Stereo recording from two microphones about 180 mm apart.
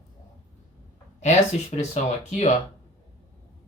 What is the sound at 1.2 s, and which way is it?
Speech, 40° left (ahead or behind).